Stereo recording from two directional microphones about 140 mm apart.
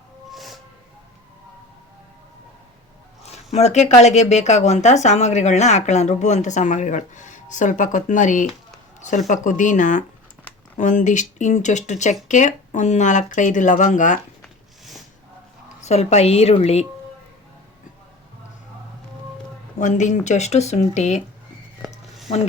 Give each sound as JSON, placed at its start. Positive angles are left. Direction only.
{"t": 0.3, "sound": "music", "side_deg": 0}
{"t": 3.2, "sound": "speech", "side_deg": 50}
{"t": 14.4, "sound": "a sound", "side_deg": 0}
{"t": 15.8, "sound": "a woman's voice", "side_deg": 50}
{"t": 19.8, "sound": "speech", "side_deg": 60}